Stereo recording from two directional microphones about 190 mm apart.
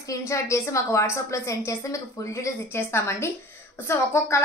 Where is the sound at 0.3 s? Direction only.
15° left (ahead or behind).